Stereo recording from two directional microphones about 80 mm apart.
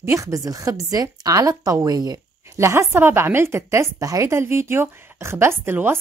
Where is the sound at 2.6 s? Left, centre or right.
Right.